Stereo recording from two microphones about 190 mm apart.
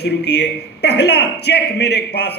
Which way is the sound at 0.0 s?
60° left (ahead or behind).